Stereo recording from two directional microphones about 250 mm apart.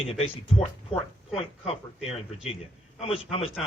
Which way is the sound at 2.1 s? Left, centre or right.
Left.